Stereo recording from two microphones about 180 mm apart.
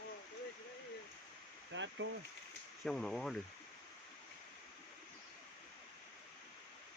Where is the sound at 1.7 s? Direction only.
90° right.